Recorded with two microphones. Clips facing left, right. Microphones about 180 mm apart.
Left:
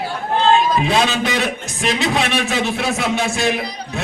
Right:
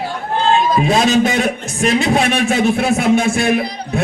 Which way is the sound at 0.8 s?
45° right (ahead or behind).